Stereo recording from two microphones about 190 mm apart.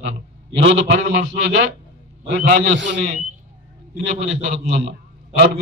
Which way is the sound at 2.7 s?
75° right (ahead or behind).